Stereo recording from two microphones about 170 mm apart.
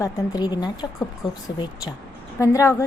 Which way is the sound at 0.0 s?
25° left (ahead or behind).